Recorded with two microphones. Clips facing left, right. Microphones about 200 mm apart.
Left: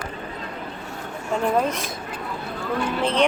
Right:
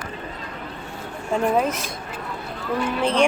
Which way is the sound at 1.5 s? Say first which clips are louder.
Right 1 dB; 5° right (ahead or behind).